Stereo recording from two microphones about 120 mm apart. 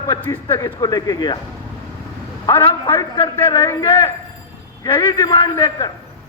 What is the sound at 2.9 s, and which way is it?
Speech, 30° left (ahead or behind).